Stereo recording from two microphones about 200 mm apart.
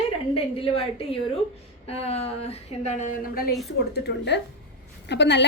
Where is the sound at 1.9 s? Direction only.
30° left (ahead or behind).